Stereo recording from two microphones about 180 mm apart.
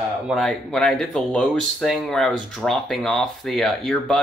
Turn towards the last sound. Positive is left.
turn(degrees=5)  # may be behind; listen again after turning